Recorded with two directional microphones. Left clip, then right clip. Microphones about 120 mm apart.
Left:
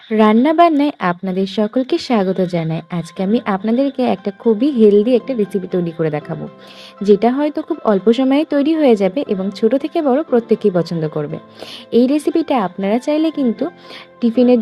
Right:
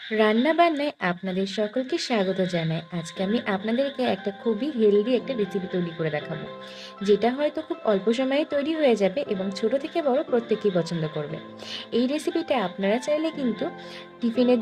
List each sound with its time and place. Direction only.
0.1 s a woman's voice: 40° left (ahead or behind)